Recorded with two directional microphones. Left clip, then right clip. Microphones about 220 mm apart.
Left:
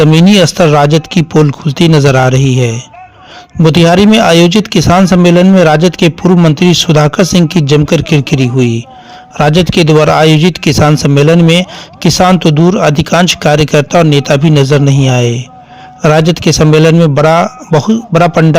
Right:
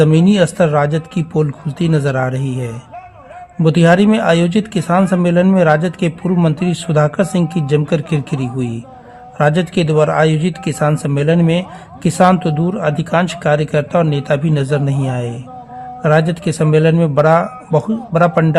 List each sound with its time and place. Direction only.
0.0 s speech: 30° left (ahead or behind)